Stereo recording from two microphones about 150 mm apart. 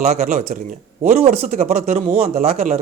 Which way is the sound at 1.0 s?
45° right (ahead or behind).